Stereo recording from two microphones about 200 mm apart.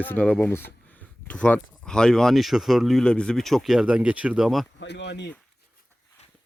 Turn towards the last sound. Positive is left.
turn(degrees=60)  # may be behind; listen again after turning